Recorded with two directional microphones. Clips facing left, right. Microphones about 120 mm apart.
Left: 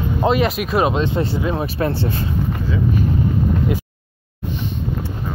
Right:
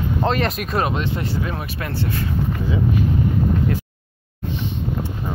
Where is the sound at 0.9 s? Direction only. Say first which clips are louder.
Left 5 dB; 25° left (ahead or behind).